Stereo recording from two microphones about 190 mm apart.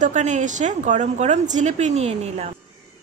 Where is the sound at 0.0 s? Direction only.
40° right (ahead or behind).